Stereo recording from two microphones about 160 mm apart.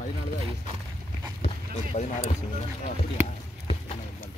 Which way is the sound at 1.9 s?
40° left (ahead or behind).